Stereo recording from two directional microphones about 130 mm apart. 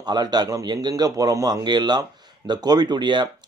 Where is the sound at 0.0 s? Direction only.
30° right (ahead or behind).